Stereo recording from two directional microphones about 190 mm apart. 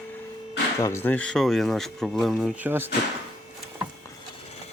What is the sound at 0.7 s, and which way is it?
Speech, 15° left (ahead or behind).